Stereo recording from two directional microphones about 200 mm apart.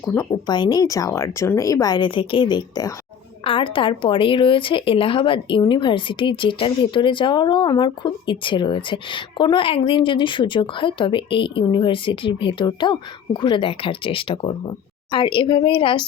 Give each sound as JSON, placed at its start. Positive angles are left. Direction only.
{"t": 0.0, "sound": "speech", "side_deg": 10}
{"t": 0.3, "sound": "speech", "side_deg": 20}